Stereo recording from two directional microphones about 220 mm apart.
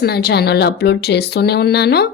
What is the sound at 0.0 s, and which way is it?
A woman's voice, 45° left (ahead or behind).